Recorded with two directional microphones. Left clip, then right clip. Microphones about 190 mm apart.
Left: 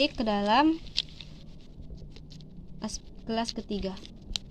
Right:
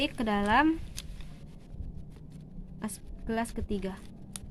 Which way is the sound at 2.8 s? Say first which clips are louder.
Left 3 dB; 5° left (ahead or behind).